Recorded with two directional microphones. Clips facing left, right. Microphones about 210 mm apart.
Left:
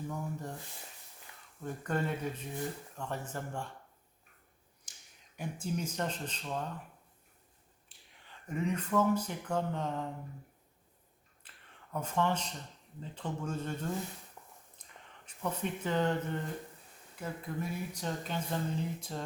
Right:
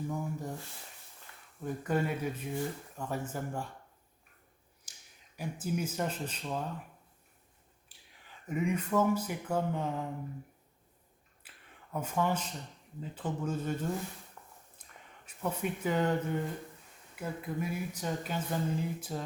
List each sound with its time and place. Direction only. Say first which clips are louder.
0.1 s a sound: right 3 dB; 10° right (ahead or behind)
1.6 s speech: right 3 dB; 5° right (ahead or behind)
5.4 s speech: right 2 dB; 5° right (ahead or behind)
8.3 s speech: right 2 dB; 10° right (ahead or behind)
11.4 s a sound: right 2 dB; 5° right (ahead or behind)
11.9 s speech: right 1 dB; 5° right (ahead or behind)
15.3 s speech: right 2 dB; 10° right (ahead or behind)